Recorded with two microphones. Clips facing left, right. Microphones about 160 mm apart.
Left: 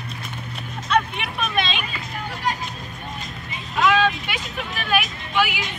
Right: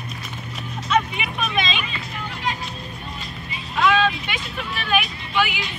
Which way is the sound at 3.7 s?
5° left (ahead or behind).